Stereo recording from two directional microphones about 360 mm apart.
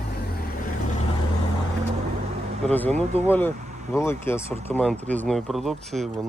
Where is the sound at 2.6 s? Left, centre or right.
Centre.